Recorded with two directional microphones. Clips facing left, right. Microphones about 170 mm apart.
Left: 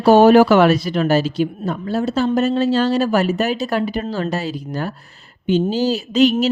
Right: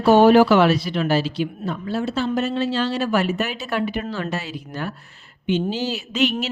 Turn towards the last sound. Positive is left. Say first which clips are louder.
# left 7 dB
turn(degrees=40)  # may be behind; listen again after turning